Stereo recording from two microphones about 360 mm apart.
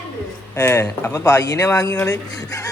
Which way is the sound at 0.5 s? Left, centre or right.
Centre.